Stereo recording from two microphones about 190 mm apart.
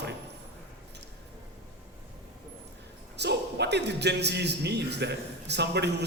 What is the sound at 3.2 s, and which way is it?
A man's voice, 60° right (ahead or behind).